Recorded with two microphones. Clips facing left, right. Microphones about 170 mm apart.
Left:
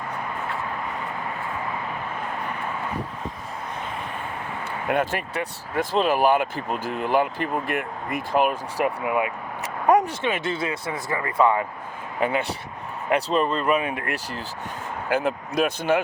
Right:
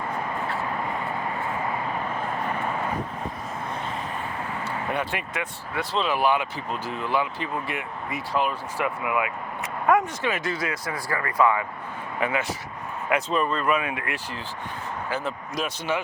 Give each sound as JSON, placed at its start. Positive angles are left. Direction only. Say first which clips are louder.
{"t": 5.1, "sound": "speech", "louder": "left 3 dB", "side_deg": 40}
{"t": 9.0, "sound": "speech", "louder": "left 2 dB", "side_deg": 35}
{"t": 10.2, "sound": "speech", "louder": "left 2 dB", "side_deg": 25}
{"t": 15.1, "sound": "speech", "louder": "left 8 dB", "side_deg": 55}